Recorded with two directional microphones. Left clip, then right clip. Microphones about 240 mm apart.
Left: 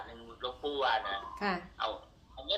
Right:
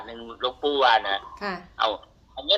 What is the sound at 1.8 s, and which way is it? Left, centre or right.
Speech, right.